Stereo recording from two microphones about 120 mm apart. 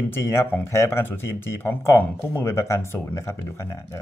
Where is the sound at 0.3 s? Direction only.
20° left (ahead or behind).